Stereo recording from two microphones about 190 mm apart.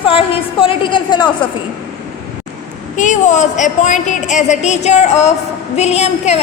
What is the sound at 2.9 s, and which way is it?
A woman's voice, 40° left (ahead or behind).